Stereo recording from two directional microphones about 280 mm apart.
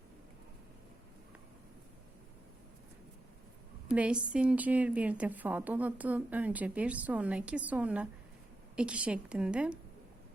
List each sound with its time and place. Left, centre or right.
3.9 s a woman's voice: centre